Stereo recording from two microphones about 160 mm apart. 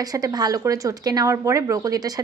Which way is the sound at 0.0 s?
25° right (ahead or behind).